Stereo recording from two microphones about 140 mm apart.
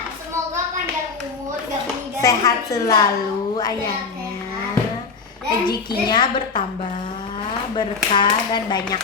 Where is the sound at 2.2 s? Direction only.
25° left (ahead or behind).